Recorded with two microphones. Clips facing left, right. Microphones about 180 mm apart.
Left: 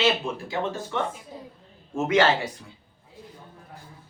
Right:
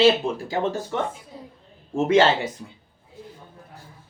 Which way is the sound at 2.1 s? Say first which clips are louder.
Right 3 dB; 25° right (ahead or behind).